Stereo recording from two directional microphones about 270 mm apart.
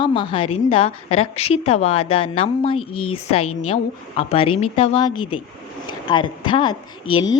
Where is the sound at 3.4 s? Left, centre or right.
Left.